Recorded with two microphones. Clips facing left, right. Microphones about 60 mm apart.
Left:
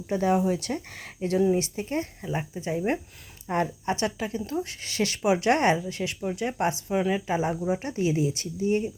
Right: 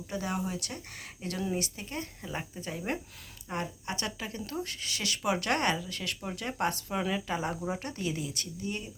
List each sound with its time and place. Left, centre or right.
0.1 s speech: left
1.4 s speech: left
2.2 s speech: left
3.5 s a woman's voice: left
4.3 s speech: centre
4.8 s speech: left
5.2 s speech: centre
6.1 s speech: centre; by 8.9 s left